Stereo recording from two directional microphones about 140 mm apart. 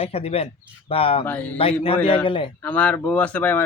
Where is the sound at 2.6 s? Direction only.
10° left (ahead or behind).